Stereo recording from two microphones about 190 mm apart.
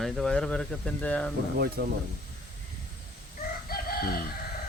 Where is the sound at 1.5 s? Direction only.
55° right (ahead or behind).